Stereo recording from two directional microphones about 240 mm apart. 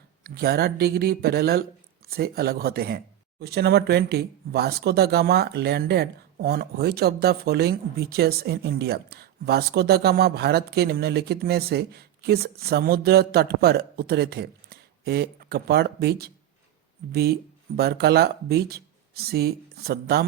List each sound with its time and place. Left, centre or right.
0.3 s speech: right